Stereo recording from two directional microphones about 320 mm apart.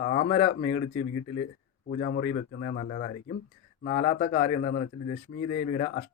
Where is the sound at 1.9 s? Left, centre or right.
Left.